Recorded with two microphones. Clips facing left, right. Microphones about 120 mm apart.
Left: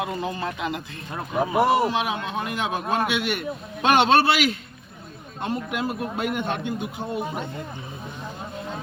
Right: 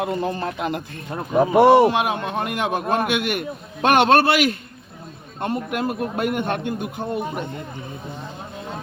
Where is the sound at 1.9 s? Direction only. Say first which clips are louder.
Right 4 dB; 50° right (ahead or behind).